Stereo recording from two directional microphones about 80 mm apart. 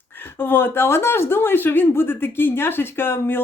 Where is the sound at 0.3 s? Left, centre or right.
Left.